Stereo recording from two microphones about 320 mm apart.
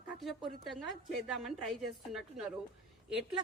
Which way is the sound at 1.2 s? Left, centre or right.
Centre.